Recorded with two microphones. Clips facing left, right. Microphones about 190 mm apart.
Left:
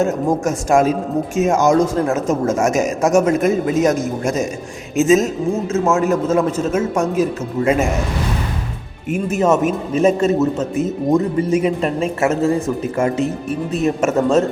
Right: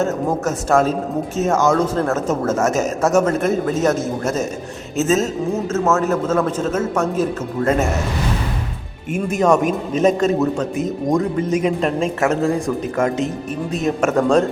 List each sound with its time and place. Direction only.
0.0 s a man's voice: 15° left (ahead or behind)
9.0 s a man's voice: 5° left (ahead or behind)